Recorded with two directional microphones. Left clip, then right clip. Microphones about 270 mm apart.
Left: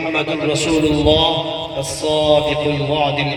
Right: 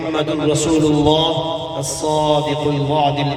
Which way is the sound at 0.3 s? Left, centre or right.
Right.